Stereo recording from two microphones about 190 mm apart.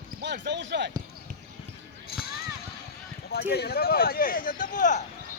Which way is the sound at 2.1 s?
55° left (ahead or behind).